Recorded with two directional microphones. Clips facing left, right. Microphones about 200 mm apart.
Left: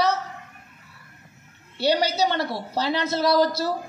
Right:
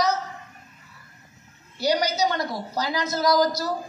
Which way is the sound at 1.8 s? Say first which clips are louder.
Left 1 dB; 30° left (ahead or behind).